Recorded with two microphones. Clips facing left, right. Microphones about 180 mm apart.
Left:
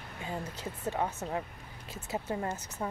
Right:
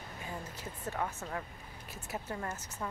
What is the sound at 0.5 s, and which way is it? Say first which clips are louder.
Speech: left 4 dB; 20° left (ahead or behind).